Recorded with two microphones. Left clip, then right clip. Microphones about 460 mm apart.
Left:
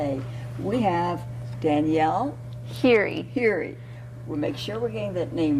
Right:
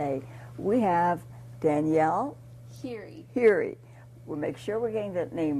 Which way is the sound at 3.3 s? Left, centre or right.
Right.